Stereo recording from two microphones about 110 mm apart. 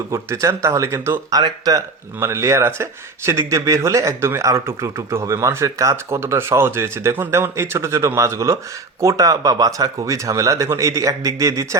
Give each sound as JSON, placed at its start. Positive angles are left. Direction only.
{"t": 0.1, "sound": "speech", "side_deg": -30}
{"t": 1.4, "sound": "speech", "side_deg": -35}
{"t": 2.2, "sound": "speech", "side_deg": -25}